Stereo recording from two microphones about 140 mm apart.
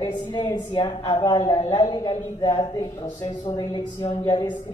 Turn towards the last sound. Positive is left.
turn(degrees=35)  # may be behind; listen again after turning